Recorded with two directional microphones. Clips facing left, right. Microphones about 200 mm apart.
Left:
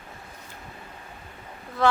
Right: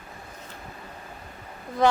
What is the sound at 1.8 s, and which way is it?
Speech, 20° right (ahead or behind).